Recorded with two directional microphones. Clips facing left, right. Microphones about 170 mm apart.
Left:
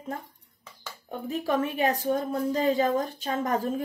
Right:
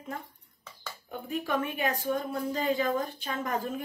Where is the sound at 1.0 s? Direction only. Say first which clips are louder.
Left 4 dB; 40° left (ahead or behind).